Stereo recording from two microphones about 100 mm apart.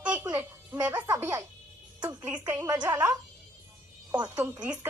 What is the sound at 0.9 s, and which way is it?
Speech, 40° right (ahead or behind).